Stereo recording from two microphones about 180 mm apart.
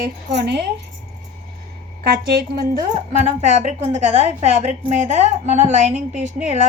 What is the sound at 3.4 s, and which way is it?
A woman's voice, 40° right (ahead or behind).